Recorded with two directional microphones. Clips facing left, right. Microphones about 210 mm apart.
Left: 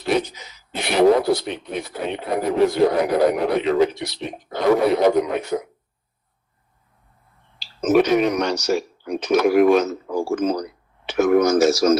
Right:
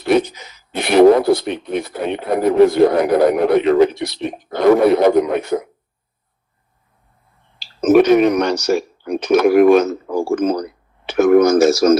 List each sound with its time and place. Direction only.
0.2 s speech: 55° right (ahead or behind)
7.6 s speech: 55° right (ahead or behind)